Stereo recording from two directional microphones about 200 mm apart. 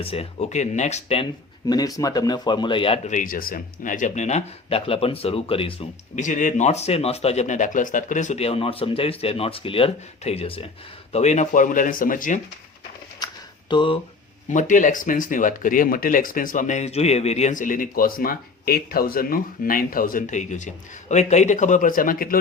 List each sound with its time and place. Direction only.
0.0 s speech: 30° left (ahead or behind)
1.6 s speech: 20° left (ahead or behind); by 12.4 s 40° left (ahead or behind)
13.1 s a sound: 20° left (ahead or behind)
14.5 s speech: 40° left (ahead or behind)